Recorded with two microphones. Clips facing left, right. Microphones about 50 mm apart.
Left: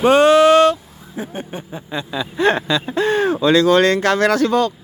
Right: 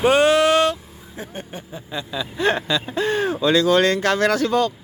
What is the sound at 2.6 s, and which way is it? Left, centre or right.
Speech, left.